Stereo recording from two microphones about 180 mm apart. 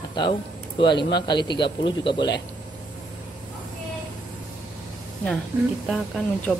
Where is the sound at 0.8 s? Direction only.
25° left (ahead or behind).